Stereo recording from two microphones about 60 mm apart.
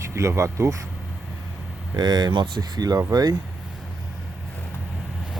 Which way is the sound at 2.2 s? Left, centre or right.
Right.